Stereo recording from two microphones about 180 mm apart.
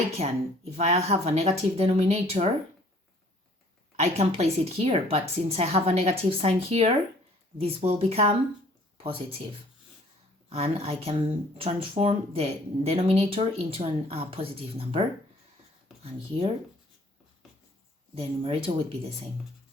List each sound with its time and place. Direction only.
0.2 s speech: 35° right (ahead or behind)
3.9 s speech: 35° right (ahead or behind)
10.5 s speech: 35° right (ahead or behind)
18.1 s speech: 30° right (ahead or behind)